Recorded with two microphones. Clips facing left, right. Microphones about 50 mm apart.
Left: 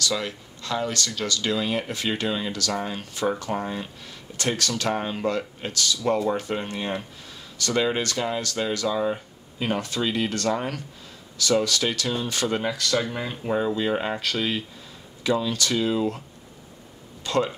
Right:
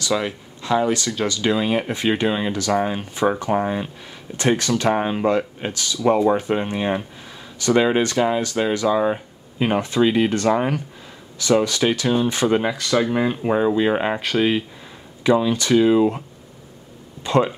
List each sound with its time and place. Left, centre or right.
0.0 s speech: centre
17.2 s speech: right